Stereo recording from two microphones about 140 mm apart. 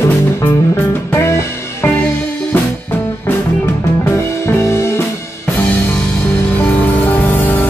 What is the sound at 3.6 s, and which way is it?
Music, 20° left (ahead or behind).